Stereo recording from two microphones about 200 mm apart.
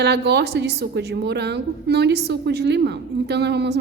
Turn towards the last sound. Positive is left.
turn(degrees=-55)  # may be behind; listen again after turning